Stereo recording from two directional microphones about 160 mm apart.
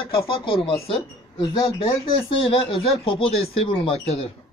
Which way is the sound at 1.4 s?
25° left (ahead or behind).